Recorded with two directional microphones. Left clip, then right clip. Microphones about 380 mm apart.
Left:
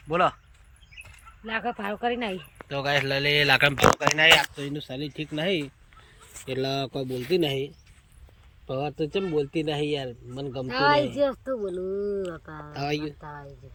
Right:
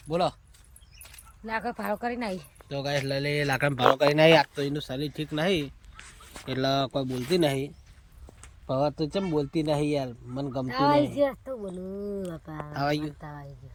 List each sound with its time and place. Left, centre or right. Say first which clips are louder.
0.1 s speech: left 4 dB; centre
4.2 s speech: left 3 dB; right
4.6 s speech: right 2 dB; centre
12.7 s speech: right 1 dB; centre